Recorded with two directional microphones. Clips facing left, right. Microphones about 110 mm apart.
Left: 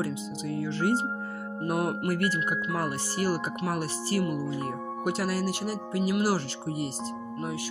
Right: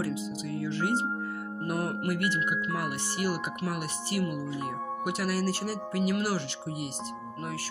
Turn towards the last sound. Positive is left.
turn(degrees=35)  # may be behind; listen again after turning